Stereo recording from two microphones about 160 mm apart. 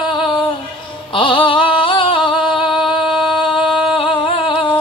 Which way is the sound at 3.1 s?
Centre (ahead or behind).